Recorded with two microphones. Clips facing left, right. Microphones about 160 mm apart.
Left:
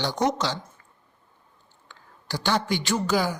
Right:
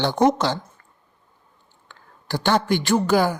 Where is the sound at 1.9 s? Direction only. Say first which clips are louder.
Right 5 dB; 55° right (ahead or behind).